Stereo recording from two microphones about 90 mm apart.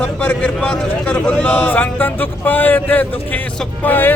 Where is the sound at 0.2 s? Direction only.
20° left (ahead or behind).